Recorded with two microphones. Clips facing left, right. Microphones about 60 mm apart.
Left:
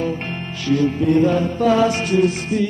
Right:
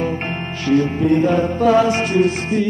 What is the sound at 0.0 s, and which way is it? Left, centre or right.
Music, right.